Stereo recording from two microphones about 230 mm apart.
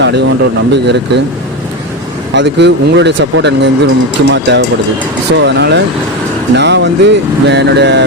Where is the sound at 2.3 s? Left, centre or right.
Right.